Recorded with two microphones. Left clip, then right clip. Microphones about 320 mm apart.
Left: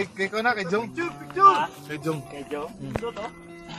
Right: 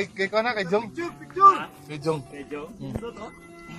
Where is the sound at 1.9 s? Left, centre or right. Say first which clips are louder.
Right 2 dB; centre.